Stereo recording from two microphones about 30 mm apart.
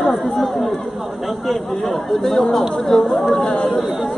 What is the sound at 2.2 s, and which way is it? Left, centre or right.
Speech, centre.